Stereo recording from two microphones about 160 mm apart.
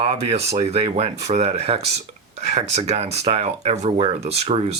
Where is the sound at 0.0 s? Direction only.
40° right (ahead or behind).